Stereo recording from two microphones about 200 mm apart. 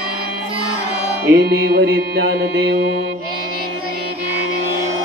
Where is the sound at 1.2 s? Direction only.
60° right (ahead or behind).